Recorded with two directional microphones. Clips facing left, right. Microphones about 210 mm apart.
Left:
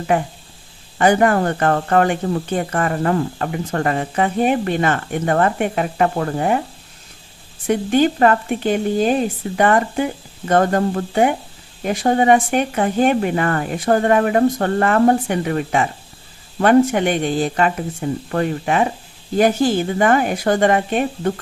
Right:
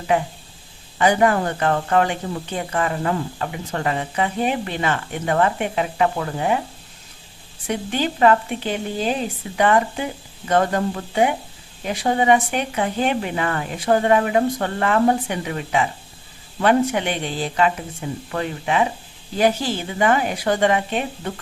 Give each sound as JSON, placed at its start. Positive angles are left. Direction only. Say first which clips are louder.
{"t": 0.9, "sound": "speech", "louder": "left 3 dB", "side_deg": 50}
{"t": 7.7, "sound": "speech", "louder": "left 8 dB", "side_deg": 50}